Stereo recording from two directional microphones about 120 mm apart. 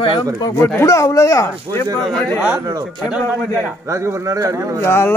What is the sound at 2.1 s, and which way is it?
Speech, 5° left (ahead or behind).